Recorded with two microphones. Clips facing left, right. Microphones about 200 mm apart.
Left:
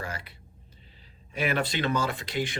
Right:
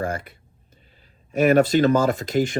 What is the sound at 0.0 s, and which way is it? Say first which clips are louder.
Speech: right 10 dB; 50° right (ahead or behind).